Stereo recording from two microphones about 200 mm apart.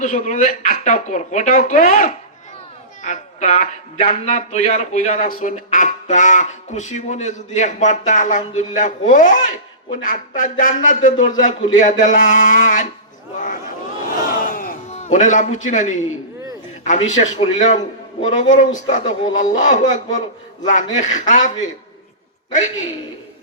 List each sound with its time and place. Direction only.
0.0 s speech: 40° left (ahead or behind)
14.5 s a sound: 40° left (ahead or behind)
16.8 s a man's voice: 35° left (ahead or behind)